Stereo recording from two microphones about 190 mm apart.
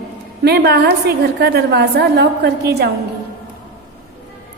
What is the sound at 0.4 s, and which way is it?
A woman's voice, 60° right (ahead or behind).